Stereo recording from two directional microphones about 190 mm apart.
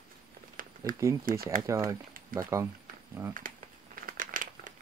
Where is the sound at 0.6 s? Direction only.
45° right (ahead or behind).